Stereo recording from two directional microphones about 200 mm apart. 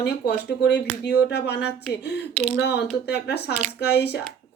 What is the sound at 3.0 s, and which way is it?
Speech, 55° left (ahead or behind).